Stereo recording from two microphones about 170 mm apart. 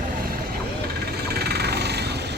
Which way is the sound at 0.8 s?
70° right (ahead or behind).